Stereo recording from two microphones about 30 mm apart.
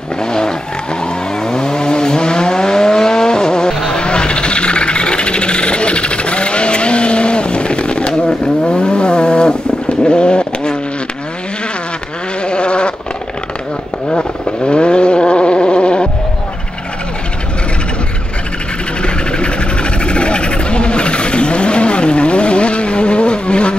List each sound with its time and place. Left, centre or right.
0.2 s vehicle: left
12.4 s sheep: left
14.7 s vehicle: left
19.0 s a sound: left